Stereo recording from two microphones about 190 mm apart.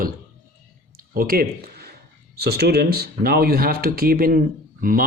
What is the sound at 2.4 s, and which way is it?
Speech, 55° right (ahead or behind).